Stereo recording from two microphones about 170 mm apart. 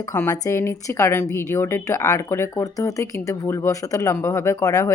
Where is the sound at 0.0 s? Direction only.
15° left (ahead or behind).